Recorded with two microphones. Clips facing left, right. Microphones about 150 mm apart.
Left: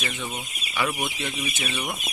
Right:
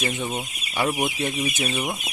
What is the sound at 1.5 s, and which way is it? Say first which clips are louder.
Speech: right 5 dB; 40° right (ahead or behind).